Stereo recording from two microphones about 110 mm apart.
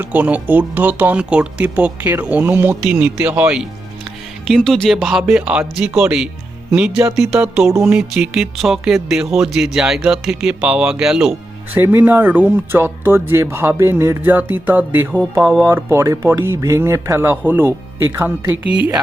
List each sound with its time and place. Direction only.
0.0 s speech: 15° right (ahead or behind)
11.8 s speech: 20° right (ahead or behind)